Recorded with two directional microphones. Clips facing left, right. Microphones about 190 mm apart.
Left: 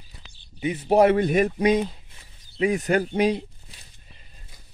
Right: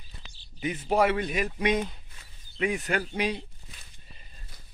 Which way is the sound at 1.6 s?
35° left (ahead or behind).